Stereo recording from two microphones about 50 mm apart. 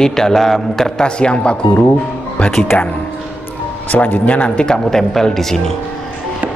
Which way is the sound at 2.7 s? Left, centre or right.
Left.